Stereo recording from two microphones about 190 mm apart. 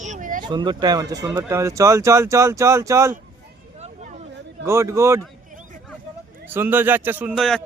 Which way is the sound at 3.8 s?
35° right (ahead or behind).